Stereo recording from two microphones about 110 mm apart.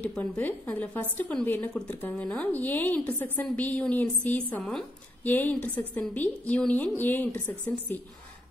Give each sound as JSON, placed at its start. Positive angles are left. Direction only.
{"t": 0.0, "sound": "a woman's voice", "side_deg": 15}